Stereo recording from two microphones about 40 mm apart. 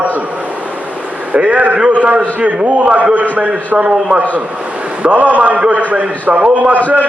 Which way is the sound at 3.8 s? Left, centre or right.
Right.